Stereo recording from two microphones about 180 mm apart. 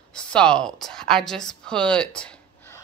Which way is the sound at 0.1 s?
5° left (ahead or behind).